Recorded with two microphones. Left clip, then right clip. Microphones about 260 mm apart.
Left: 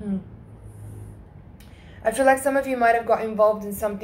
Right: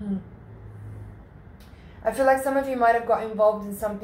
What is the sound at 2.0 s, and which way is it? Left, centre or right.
A woman's voice, left.